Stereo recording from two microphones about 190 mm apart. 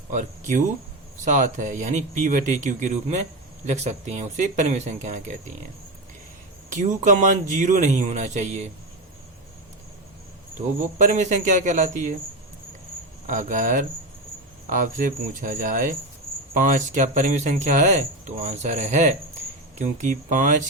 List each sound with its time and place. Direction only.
0.1 s speech: 45° right (ahead or behind)
6.7 s speech: 45° right (ahead or behind)
10.9 s speech: 40° right (ahead or behind)
13.2 s speech: 40° right (ahead or behind)